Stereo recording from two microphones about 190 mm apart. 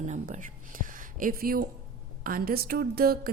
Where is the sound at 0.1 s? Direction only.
45° right (ahead or behind).